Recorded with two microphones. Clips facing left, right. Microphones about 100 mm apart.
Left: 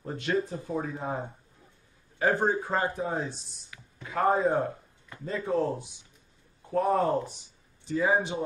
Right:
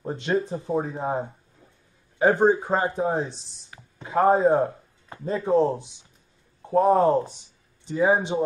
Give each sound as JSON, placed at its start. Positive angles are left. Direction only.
{"t": 0.0, "sound": "speech", "side_deg": -25}